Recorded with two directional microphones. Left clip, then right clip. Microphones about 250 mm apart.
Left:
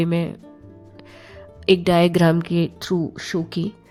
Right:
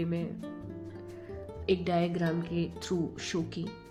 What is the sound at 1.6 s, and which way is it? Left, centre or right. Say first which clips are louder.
Speech: left 13 dB; left.